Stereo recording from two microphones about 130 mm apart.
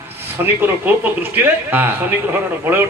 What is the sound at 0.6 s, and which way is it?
A man's voice, 15° right (ahead or behind).